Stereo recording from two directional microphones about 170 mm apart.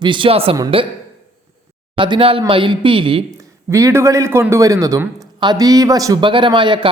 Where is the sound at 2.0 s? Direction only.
30° right (ahead or behind).